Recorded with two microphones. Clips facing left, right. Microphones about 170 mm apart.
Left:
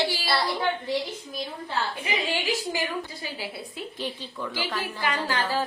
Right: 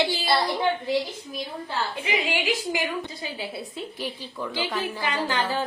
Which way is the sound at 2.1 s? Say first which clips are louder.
Right 4 dB; 15° right (ahead or behind).